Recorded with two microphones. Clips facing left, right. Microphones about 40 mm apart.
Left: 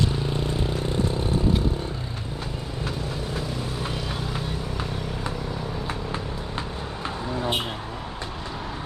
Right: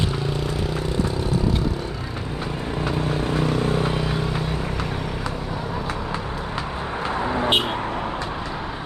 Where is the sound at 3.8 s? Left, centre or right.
Right.